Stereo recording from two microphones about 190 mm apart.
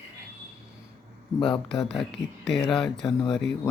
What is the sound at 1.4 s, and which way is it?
Speech, 5° left (ahead or behind).